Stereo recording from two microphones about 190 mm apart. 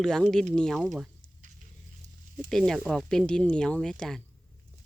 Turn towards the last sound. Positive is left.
turn(degrees=5)  # may be behind; listen again after turning